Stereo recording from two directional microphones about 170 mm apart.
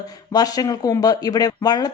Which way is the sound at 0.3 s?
20° left (ahead or behind).